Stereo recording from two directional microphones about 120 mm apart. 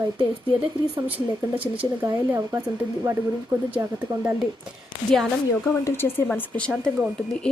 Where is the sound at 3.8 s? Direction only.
30° right (ahead or behind).